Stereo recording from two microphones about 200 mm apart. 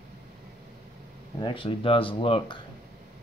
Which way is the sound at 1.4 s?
25° left (ahead or behind).